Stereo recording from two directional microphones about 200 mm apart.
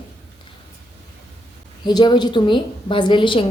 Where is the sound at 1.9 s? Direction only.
20° left (ahead or behind).